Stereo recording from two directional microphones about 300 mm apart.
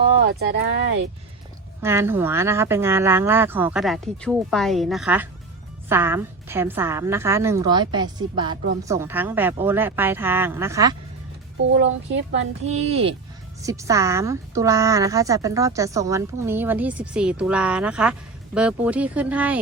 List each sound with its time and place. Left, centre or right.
0.3 s speech: right
1.8 s a woman's voice: centre
11.8 s speech: right
12.6 s a woman's voice: right; by 19.5 s centre